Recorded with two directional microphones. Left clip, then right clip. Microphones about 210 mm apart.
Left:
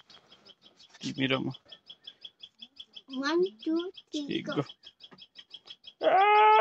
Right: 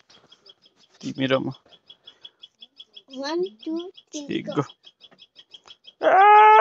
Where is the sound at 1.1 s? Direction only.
25° right (ahead or behind).